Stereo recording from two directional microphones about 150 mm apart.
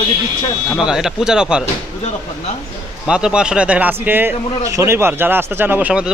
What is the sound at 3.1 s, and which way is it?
A man's voice, 5° right (ahead or behind).